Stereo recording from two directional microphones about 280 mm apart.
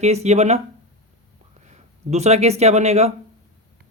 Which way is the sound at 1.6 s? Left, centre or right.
Right.